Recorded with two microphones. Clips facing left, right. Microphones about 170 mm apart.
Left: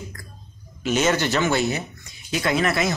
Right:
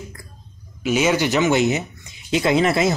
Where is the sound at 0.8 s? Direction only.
10° right (ahead or behind).